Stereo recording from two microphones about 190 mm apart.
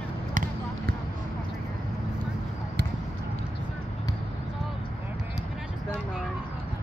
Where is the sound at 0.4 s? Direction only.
45° right (ahead or behind).